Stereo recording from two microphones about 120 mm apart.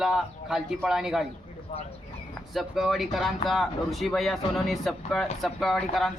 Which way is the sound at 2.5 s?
Centre (ahead or behind).